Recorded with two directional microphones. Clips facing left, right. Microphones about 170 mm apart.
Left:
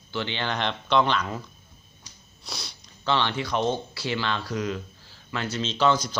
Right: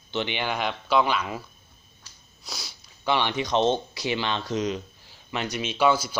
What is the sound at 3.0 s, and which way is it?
Speech, 15° right (ahead or behind).